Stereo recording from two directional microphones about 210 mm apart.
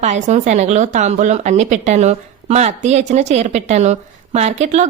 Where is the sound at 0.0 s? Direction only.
35° right (ahead or behind).